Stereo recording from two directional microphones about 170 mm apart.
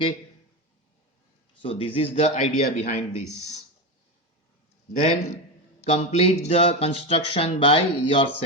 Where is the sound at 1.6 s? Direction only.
30° left (ahead or behind).